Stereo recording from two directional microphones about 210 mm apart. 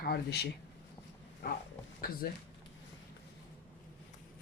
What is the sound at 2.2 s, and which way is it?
Speech, 45° left (ahead or behind).